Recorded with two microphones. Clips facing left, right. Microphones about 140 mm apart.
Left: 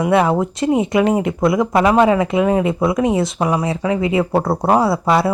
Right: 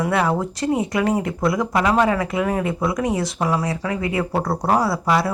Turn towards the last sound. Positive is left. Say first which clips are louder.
# left 4 dB
turn(degrees=25)  # may be behind; listen again after turning